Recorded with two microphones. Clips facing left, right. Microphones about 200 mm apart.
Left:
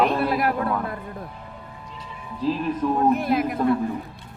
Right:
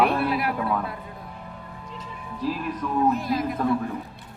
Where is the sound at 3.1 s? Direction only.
60° left (ahead or behind).